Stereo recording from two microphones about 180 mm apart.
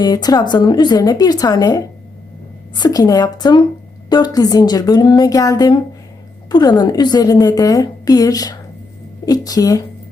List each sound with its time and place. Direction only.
0.0 s a woman's voice: 20° left (ahead or behind)